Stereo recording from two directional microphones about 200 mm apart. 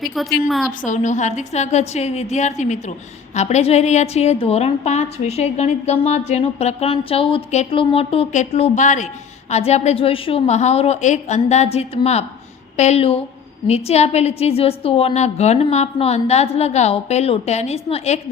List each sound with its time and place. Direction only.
0.2 s a woman's voice: centre (ahead or behind)
0.9 s a woman's voice: 35° left (ahead or behind)